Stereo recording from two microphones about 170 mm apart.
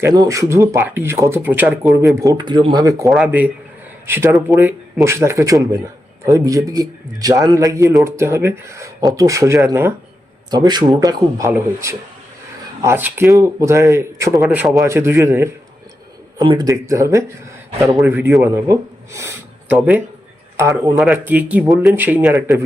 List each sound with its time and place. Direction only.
0.0 s speech: 20° right (ahead or behind); by 2.0 s 5° right (ahead or behind)
2.2 s a man's voice: 25° right (ahead or behind)
3.1 s a man's voice: 5° right (ahead or behind)
16.4 s a man's voice: 25° right (ahead or behind)
19.7 s speech: 5° right (ahead or behind)
20.6 s speech: 15° right (ahead or behind)